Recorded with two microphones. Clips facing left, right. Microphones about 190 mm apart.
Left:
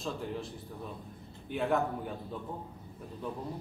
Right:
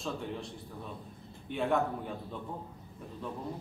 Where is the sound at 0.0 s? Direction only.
Centre (ahead or behind).